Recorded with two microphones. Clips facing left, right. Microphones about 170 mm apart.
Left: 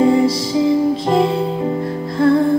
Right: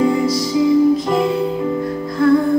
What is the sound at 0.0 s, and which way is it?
Music, 30° left (ahead or behind).